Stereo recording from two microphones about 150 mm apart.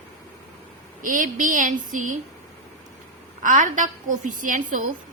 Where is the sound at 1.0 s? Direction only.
65° right (ahead or behind).